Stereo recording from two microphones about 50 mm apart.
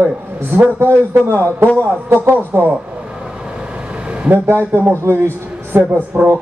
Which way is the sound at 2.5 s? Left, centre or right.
Right.